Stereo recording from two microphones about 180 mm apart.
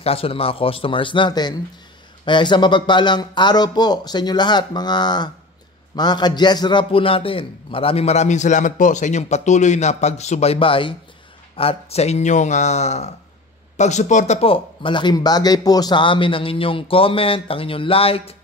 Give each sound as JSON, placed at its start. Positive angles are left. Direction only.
{"t": 0.0, "sound": "a man's voice", "side_deg": 30}